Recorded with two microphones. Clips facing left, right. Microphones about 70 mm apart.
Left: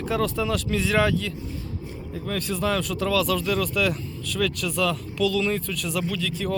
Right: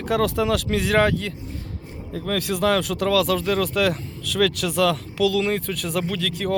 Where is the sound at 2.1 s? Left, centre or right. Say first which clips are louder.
Right 4 dB; right.